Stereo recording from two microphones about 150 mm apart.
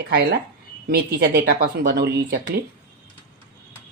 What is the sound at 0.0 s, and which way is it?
Speech, 90° right.